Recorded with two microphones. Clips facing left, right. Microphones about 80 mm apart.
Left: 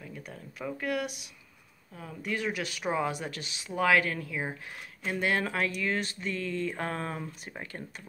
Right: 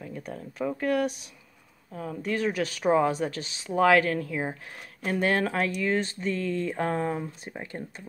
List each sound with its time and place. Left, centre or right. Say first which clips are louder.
0.2 s speech: right 8 dB; right